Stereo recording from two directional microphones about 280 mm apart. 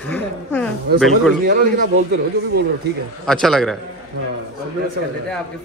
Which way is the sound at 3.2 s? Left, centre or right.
Centre.